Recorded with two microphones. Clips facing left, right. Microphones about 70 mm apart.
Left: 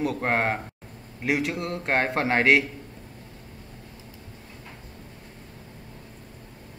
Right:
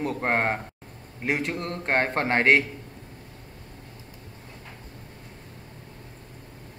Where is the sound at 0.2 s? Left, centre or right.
Centre.